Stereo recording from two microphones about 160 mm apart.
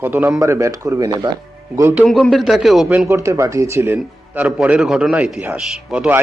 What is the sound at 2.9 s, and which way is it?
A man's voice, 15° right (ahead or behind).